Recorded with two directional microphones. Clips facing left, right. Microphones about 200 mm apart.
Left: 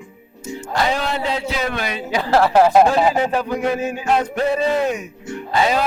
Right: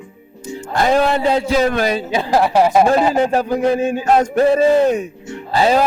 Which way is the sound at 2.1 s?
15° right (ahead or behind).